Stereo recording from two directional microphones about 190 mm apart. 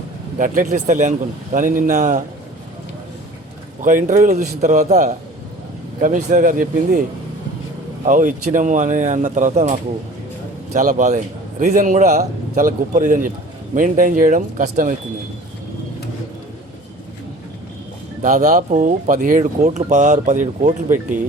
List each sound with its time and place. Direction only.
0.3 s speech: 45° right (ahead or behind)
3.8 s speech: 40° right (ahead or behind)
8.0 s speech: 40° right (ahead or behind)
10.8 s speech: 40° right (ahead or behind)
18.2 s speech: 40° right (ahead or behind)